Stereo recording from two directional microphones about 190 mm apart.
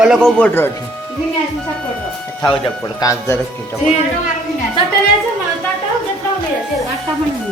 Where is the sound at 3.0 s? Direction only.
15° left (ahead or behind).